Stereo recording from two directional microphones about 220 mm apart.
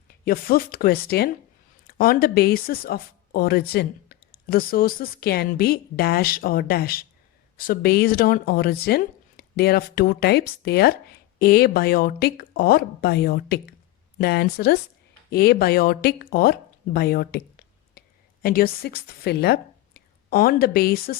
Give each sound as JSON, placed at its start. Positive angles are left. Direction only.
{"t": 0.3, "sound": "speech", "side_deg": 40}